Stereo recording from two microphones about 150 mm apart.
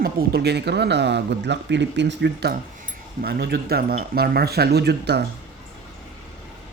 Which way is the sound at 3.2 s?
90° right.